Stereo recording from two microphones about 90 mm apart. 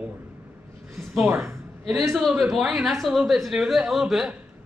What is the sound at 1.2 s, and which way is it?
Speech, 25° right (ahead or behind).